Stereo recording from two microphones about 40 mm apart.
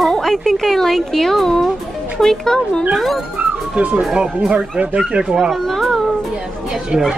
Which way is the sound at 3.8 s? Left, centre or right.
Right.